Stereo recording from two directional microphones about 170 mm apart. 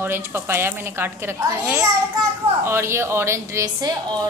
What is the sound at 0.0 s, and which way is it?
A woman's voice, 15° right (ahead or behind).